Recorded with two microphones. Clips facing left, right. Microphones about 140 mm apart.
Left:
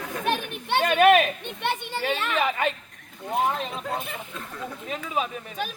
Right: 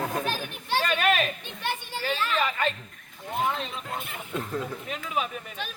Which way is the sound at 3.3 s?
45° left (ahead or behind).